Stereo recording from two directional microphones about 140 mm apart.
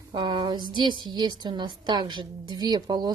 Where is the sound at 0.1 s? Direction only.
35° right (ahead or behind).